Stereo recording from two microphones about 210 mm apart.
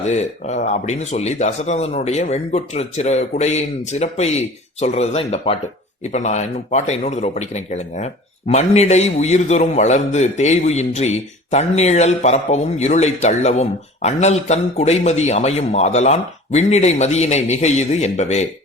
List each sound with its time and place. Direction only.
0.1 s speech: 35° left (ahead or behind)